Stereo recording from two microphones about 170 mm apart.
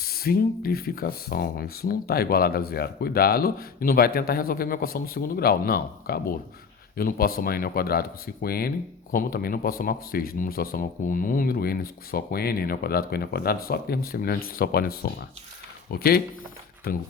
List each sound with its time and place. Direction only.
0.0 s speech: 65° left (ahead or behind)